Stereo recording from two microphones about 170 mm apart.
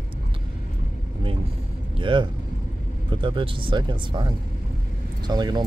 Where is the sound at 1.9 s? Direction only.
30° right (ahead or behind).